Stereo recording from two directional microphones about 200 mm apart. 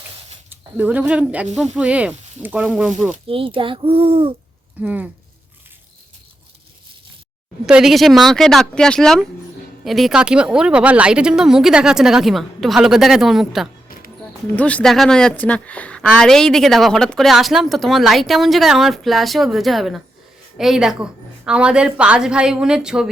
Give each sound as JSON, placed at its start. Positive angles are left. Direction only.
{"t": 0.5, "sound": "speech", "side_deg": -10}
{"t": 3.2, "sound": "speech", "side_deg": -25}
{"t": 4.8, "sound": "speech", "side_deg": -10}
{"t": 7.7, "sound": "speech", "side_deg": 0}
{"t": 13.8, "sound": "a sound", "side_deg": 45}
{"t": 14.5, "sound": "speech", "side_deg": 5}